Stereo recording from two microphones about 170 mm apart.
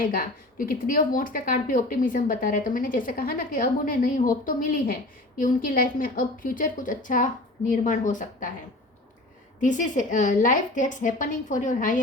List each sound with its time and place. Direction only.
0.0 s a woman's voice: 55° left (ahead or behind)
9.6 s a woman's voice: 50° left (ahead or behind)